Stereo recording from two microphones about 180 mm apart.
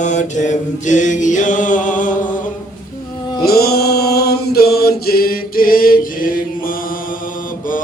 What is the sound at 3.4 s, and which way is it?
Chant, 60° left (ahead or behind).